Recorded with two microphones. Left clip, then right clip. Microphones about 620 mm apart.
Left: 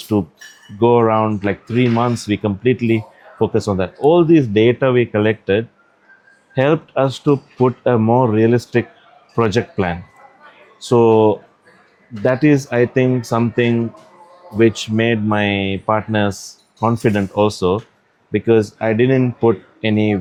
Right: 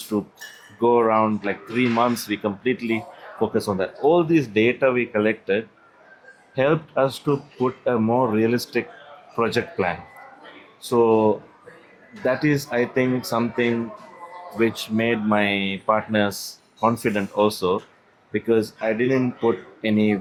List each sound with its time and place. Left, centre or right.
0.1 s speech: left